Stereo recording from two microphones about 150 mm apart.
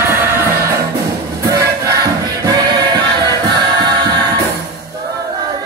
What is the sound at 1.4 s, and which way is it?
Music, 20° right (ahead or behind).